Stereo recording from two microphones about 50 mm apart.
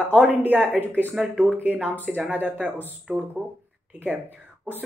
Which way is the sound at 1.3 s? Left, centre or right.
Right.